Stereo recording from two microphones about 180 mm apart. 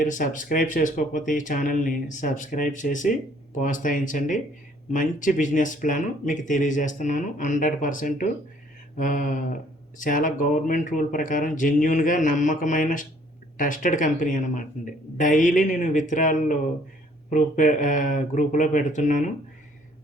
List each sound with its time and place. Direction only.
0.0 s speech: 45° left (ahead or behind)